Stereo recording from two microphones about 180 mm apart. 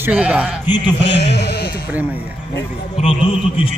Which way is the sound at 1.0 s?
70° left (ahead or behind).